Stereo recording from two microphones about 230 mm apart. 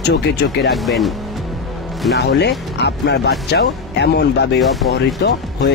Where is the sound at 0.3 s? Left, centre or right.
Left.